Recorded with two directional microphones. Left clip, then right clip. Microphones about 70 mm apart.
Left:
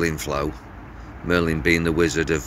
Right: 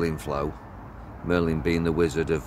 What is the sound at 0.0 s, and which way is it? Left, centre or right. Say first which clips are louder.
Speech: left 4 dB; right.